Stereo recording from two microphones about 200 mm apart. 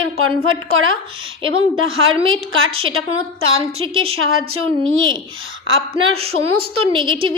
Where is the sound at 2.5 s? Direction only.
85° right.